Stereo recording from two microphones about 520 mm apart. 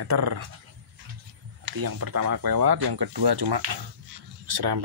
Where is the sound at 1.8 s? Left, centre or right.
Right.